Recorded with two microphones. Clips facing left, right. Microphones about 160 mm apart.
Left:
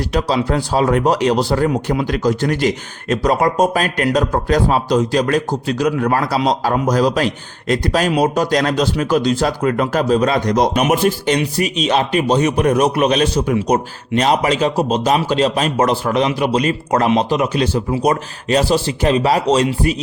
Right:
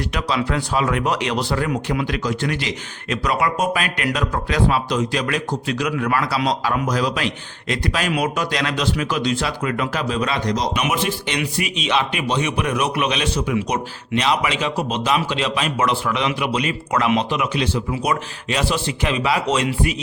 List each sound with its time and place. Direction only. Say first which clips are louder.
0.1 s speech: left 7 dB; 35° left (ahead or behind)